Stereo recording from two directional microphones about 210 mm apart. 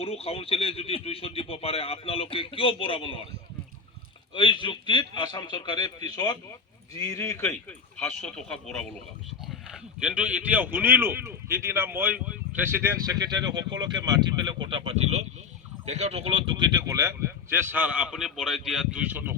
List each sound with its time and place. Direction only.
0.0 s speech: 30° left (ahead or behind)
4.4 s a man's voice: 20° left (ahead or behind); by 19.4 s 10° right (ahead or behind)